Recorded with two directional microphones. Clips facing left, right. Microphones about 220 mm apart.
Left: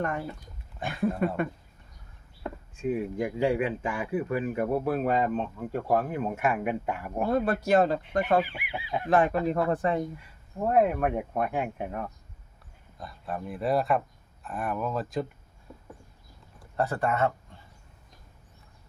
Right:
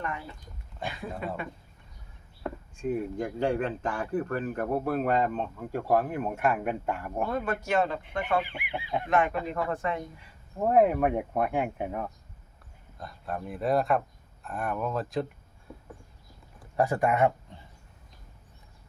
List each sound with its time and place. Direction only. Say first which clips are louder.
0.0 s speech: left 5 dB; 45° left (ahead or behind)
2.7 s speech: left 2 dB; 5° left (ahead or behind)
7.3 s speech: left 5 dB; 35° left (ahead or behind)
8.5 s speech: right 1 dB; 5° left (ahead or behind)
9.0 s speech: left 4 dB; 35° left (ahead or behind)
10.8 s speech: right 2 dB; 10° right (ahead or behind)
16.7 s speech: right 2 dB; 15° right (ahead or behind)